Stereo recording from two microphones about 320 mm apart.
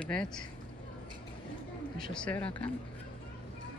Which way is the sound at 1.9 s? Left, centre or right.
Centre.